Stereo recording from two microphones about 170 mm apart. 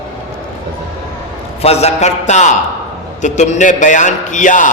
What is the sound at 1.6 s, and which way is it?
A man's voice, 40° left (ahead or behind).